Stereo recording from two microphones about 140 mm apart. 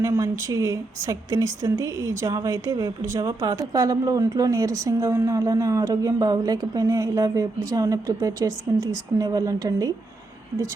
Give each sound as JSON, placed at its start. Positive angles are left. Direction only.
{"t": 0.0, "sound": "a woman's voice", "side_deg": -20}